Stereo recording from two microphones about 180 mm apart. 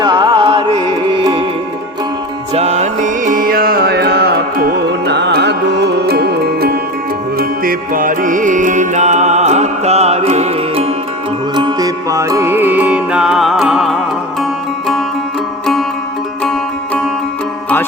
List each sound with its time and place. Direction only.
0.0 s music: 25° right (ahead or behind)
2.5 s music: 40° right (ahead or behind)
11.5 s music: 25° right (ahead or behind); by 14.0 s centre (ahead or behind)
16.4 s music: 5° left (ahead or behind)